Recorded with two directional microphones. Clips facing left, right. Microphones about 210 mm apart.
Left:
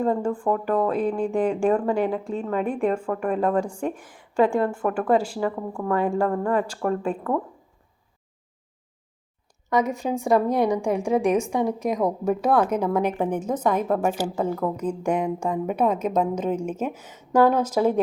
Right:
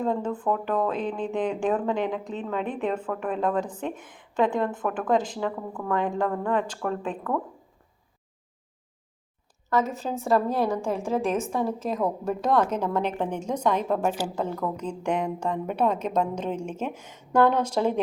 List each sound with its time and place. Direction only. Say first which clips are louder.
0.0 s speech: left 3 dB; 10° left (ahead or behind)
9.6 s speech: left 3 dB; 15° left (ahead or behind)